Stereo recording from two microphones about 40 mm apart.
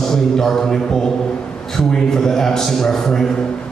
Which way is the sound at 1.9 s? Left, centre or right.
Centre.